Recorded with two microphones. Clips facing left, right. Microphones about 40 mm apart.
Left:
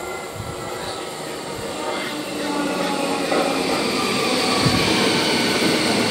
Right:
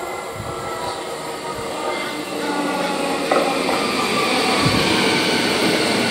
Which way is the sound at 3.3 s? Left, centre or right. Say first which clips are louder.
Right 3 dB; right.